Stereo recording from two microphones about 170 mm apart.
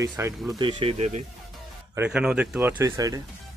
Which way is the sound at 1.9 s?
10° right (ahead or behind).